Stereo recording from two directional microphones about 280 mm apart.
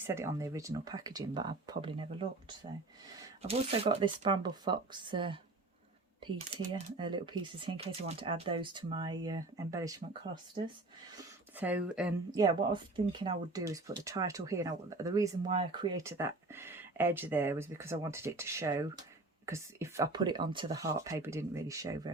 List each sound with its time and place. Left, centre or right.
0.0 s speech: centre
3.4 s speech: right
11.5 s speech: centre
12.3 s speech: centre